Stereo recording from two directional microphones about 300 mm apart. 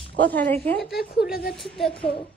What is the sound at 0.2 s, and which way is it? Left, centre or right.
A child's voice, centre.